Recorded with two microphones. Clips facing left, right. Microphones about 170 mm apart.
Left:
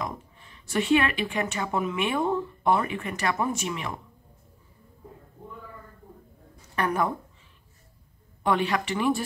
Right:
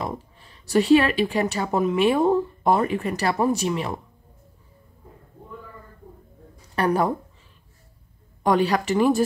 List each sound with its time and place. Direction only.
0.0 s speech: 35° right (ahead or behind)
6.7 s speech: 35° right (ahead or behind)
8.5 s speech: 40° right (ahead or behind)